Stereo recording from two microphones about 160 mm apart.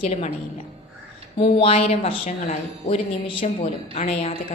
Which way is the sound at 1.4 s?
35° left (ahead or behind).